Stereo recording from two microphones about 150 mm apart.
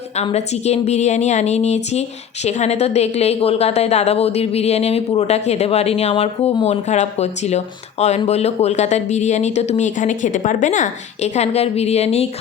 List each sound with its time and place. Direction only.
0.2 s a woman's voice: 45° left (ahead or behind)